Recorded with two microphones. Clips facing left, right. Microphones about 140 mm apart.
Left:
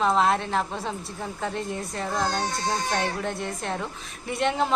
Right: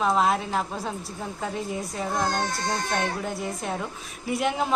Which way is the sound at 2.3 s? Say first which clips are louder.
Right 1 dB; 50° right (ahead or behind).